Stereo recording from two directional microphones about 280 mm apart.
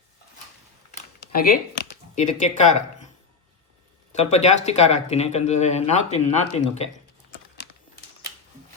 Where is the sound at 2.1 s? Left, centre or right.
Left.